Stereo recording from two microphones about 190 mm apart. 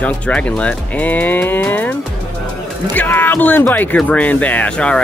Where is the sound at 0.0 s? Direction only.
5° left (ahead or behind).